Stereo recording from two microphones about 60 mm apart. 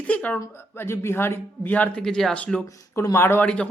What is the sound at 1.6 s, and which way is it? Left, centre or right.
Speech, left.